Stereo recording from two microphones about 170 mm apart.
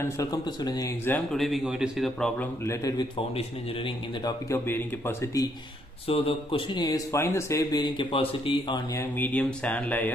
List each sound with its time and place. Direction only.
0.0 s speech: 20° left (ahead or behind)
1.3 s speech: centre (ahead or behind)
2.6 s speech: 20° left (ahead or behind)
3.3 s speech: 30° left (ahead or behind)
4.5 s speech: 15° left (ahead or behind)
6.0 s speech: 35° left (ahead or behind)
9.2 s speech: 10° left (ahead or behind)